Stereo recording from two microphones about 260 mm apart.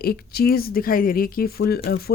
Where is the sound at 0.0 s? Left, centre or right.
Left.